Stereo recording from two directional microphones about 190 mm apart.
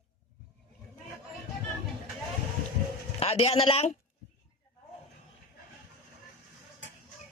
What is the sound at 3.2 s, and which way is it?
Speech, 30° left (ahead or behind).